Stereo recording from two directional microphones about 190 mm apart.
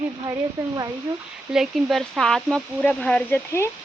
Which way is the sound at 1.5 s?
Centre (ahead or behind).